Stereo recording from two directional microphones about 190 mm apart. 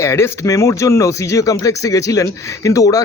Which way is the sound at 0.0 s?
15° left (ahead or behind).